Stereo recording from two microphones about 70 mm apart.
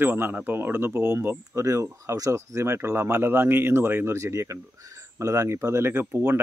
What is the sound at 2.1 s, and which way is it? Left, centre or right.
Speech, right.